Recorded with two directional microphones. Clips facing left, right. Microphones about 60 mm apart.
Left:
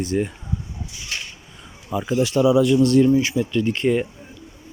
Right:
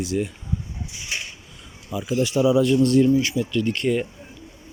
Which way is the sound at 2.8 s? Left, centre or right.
Left.